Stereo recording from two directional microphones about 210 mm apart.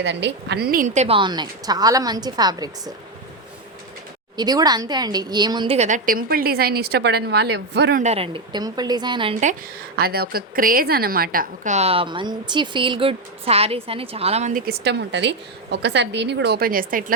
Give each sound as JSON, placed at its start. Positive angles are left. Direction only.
{"t": 0.0, "sound": "speech", "side_deg": -55}
{"t": 4.4, "sound": "a woman's voice", "side_deg": -20}
{"t": 8.0, "sound": "speech", "side_deg": -30}
{"t": 9.9, "sound": "a woman's voice", "side_deg": -45}